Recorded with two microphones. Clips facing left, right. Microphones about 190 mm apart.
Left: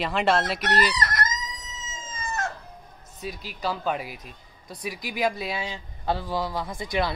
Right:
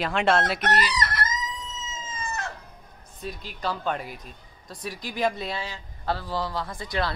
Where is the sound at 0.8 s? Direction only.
45° left (ahead or behind).